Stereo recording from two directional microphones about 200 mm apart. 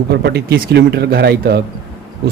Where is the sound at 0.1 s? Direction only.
55° right (ahead or behind).